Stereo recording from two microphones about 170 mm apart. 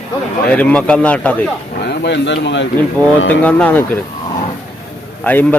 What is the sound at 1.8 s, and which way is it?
Speech, 85° left.